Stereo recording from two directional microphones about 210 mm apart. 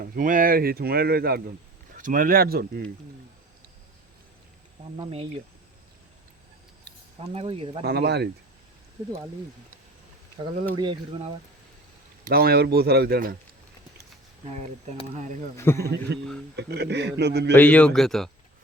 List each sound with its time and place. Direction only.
0.0 s speech: 40° right (ahead or behind)
4.9 s speech: 30° right (ahead or behind)
7.2 s speech: 25° right (ahead or behind)
7.9 s speech: 50° right (ahead or behind)
10.8 s speech: 20° right (ahead or behind)
12.2 s speech: 45° right (ahead or behind)
15.1 s speech: 35° right (ahead or behind)
15.5 s speech: 15° left (ahead or behind)
16.1 s speech: 55° right (ahead or behind)
17.5 s speech: 5° left (ahead or behind)